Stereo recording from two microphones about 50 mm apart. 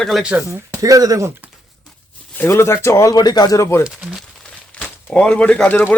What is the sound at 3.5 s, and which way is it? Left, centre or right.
Speech, left.